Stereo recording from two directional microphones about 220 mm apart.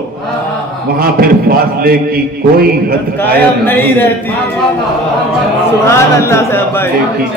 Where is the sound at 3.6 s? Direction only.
10° left (ahead or behind).